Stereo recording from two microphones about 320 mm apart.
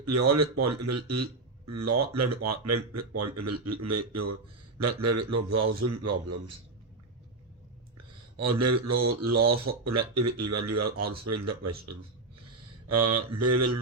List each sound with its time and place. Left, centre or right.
0.0 s speech: right
7.9 s speech: right